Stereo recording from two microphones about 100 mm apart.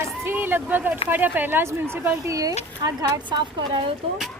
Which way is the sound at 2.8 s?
45° right (ahead or behind).